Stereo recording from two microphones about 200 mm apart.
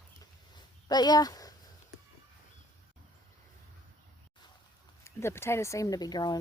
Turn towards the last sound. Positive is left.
turn(degrees=20)  # may be behind; listen again after turning